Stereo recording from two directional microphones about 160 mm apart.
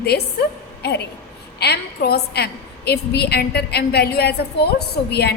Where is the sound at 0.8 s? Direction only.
90° left.